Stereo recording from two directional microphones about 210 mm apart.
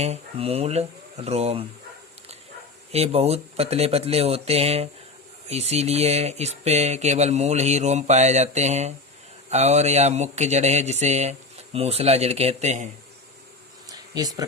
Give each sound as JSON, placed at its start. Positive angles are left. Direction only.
{"t": 0.0, "sound": "speech", "side_deg": -30}
{"t": 2.9, "sound": "speech", "side_deg": -30}
{"t": 13.8, "sound": "a sound", "side_deg": -15}